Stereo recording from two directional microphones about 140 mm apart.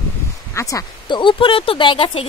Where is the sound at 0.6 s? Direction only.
25° left (ahead or behind).